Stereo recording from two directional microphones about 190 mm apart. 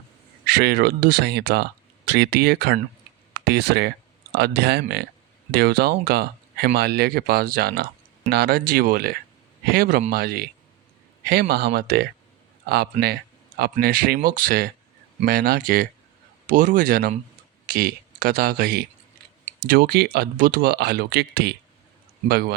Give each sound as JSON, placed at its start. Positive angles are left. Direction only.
{"t": 0.4, "sound": "speech", "side_deg": -55}